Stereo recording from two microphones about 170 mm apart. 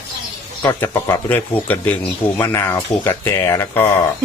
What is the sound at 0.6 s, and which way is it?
Speech, 15° left (ahead or behind).